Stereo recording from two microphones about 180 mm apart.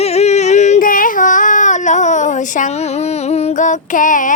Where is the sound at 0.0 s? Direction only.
35° left (ahead or behind).